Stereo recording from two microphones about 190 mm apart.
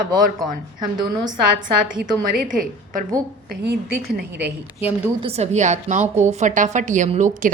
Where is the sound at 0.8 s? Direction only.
20° right (ahead or behind).